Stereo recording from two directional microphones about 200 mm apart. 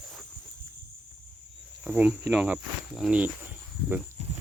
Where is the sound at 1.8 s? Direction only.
5° right (ahead or behind).